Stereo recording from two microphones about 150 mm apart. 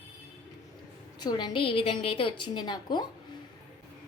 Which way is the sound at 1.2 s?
30° left (ahead or behind).